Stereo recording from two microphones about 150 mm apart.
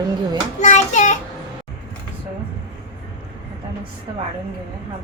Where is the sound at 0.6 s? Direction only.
55° left (ahead or behind).